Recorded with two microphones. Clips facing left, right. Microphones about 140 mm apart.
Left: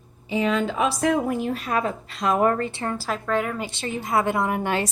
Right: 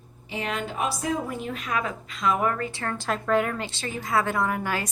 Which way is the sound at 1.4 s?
35° left (ahead or behind).